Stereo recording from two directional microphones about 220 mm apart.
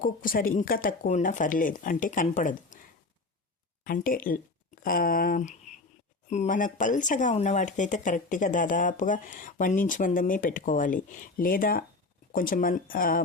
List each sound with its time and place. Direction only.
0.0 s speech: 40° left (ahead or behind)
3.8 s speech: 40° left (ahead or behind)